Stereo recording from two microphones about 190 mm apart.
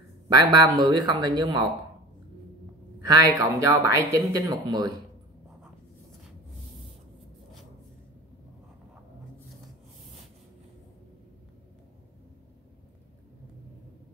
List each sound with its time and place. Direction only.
0.3 s speech: 20° right (ahead or behind)
3.0 s speech: 20° right (ahead or behind)